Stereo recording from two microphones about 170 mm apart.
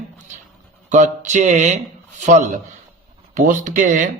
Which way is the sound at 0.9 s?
45° right (ahead or behind).